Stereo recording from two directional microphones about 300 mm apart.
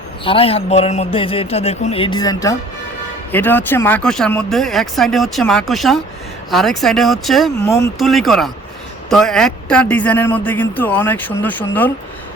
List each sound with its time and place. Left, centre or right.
0.3 s a man's voice: centre